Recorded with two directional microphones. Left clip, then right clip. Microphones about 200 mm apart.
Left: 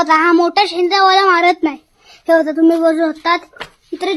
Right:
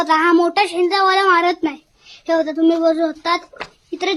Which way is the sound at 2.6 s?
45° left (ahead or behind).